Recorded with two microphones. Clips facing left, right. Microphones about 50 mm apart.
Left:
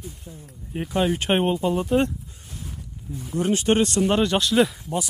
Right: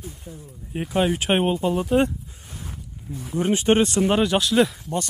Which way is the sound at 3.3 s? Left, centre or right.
Right.